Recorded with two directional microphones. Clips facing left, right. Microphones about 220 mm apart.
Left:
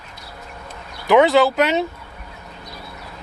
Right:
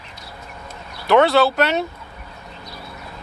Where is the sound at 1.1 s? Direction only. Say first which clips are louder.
Left 1 dB; 15° left (ahead or behind).